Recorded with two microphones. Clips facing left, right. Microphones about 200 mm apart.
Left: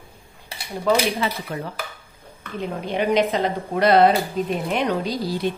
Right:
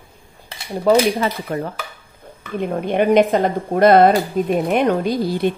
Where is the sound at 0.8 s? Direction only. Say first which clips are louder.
Right 6 dB; 45° right (ahead or behind).